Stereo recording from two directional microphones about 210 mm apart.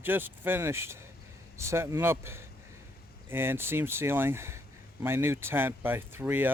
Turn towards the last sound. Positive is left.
turn(degrees=-10)  # may be behind; listen again after turning